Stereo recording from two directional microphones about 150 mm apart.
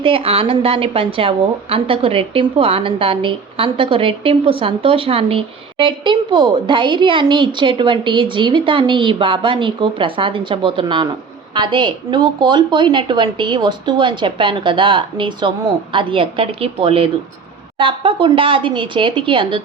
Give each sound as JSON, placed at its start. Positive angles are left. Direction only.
{"t": 0.0, "sound": "a woman's voice", "side_deg": -40}